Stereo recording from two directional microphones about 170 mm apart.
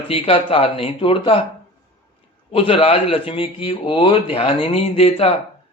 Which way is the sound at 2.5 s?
35° left (ahead or behind).